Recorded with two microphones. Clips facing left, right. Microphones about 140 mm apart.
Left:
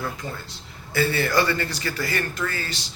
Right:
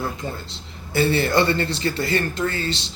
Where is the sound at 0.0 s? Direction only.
25° right (ahead or behind).